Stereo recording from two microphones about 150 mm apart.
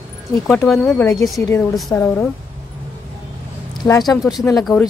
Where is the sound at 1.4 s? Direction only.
20° left (ahead or behind).